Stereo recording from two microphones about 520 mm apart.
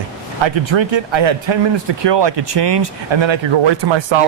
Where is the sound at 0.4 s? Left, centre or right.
Right.